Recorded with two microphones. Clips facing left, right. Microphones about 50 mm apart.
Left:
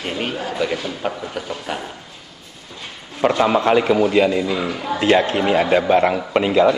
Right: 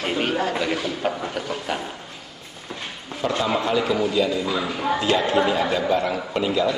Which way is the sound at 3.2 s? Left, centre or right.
Left.